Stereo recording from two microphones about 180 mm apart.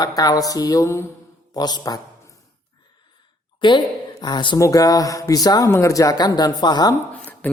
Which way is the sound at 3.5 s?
25° left (ahead or behind).